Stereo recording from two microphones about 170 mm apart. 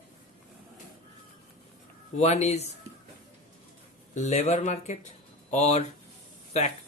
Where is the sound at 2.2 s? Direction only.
40° left (ahead or behind).